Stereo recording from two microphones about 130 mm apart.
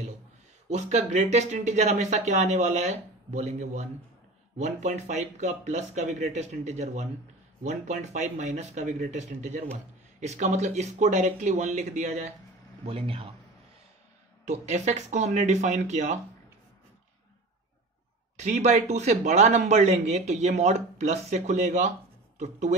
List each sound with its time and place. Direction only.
0.7 s a man's voice: 65° right (ahead or behind)
12.8 s a man's voice: 45° right (ahead or behind)
14.5 s a man's voice: 60° right (ahead or behind)
18.3 s a man's voice: 65° right (ahead or behind)